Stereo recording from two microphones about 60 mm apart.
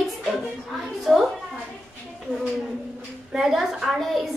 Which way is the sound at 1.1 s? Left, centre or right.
Centre.